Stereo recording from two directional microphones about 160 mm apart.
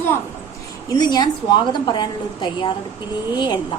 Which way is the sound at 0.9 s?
25° left (ahead or behind).